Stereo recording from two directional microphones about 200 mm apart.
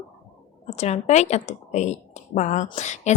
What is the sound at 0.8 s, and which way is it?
A woman's voice, 35° left (ahead or behind).